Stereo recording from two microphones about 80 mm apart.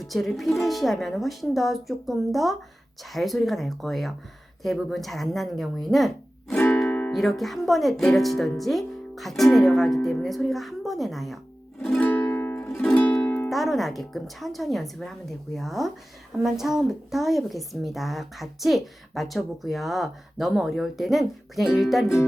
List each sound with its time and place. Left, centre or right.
0.0 s speech: centre
7.1 s speech: centre
11.8 s music: centre
12.0 s music: left
12.6 s music: centre
13.2 s music: left
13.5 s speech: centre